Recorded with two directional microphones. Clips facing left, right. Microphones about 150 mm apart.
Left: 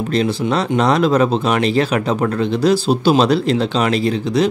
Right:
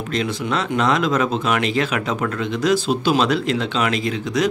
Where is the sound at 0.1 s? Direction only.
35° left (ahead or behind).